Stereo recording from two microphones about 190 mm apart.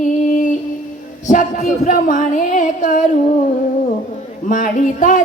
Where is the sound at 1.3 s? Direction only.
45° left (ahead or behind).